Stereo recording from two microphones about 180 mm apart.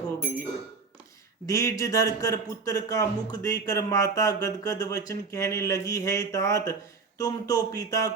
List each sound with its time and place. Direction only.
1.5 s a man's voice: 15° left (ahead or behind)